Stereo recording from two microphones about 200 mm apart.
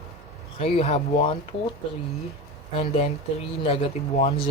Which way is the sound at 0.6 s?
30° left (ahead or behind).